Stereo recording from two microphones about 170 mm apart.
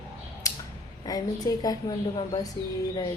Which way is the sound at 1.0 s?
20° left (ahead or behind).